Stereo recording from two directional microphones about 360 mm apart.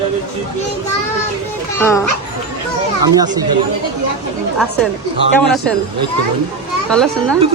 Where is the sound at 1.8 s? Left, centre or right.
Centre.